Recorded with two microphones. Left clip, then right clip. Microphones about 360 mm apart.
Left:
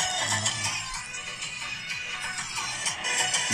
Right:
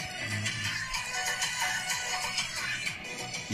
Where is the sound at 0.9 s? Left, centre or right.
Centre.